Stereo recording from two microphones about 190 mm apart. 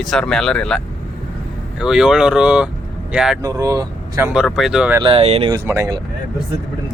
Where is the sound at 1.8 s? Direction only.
5° right (ahead or behind).